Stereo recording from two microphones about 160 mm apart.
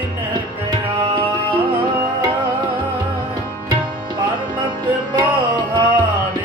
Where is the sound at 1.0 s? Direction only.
35° right (ahead or behind).